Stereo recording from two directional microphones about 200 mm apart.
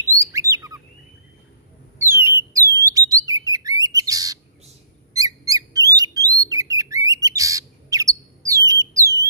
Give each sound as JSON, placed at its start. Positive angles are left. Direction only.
{"t": 0.0, "sound": "chirp", "side_deg": -15}
{"t": 2.0, "sound": "bird", "side_deg": -10}
{"t": 5.1, "sound": "squeak", "side_deg": -20}
{"t": 5.9, "sound": "bird", "side_deg": -20}